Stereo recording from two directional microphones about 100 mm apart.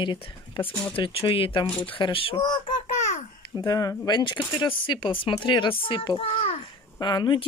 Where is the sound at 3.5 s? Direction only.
35° left (ahead or behind); by 6.6 s 65° left (ahead or behind).